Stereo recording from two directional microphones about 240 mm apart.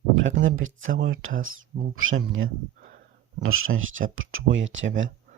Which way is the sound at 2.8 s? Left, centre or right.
Right.